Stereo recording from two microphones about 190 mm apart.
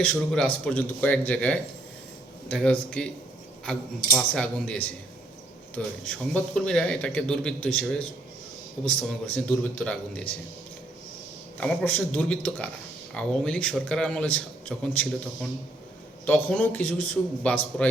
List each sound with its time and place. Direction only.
0.0 s a man's voice: 5° left (ahead or behind)
11.6 s a man's voice: 5° left (ahead or behind)
16.2 s a man's voice: 5° left (ahead or behind)